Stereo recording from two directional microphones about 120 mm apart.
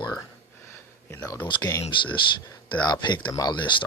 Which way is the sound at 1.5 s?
35° left (ahead or behind).